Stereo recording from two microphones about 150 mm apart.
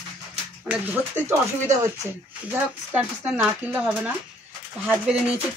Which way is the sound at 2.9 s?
5° right (ahead or behind).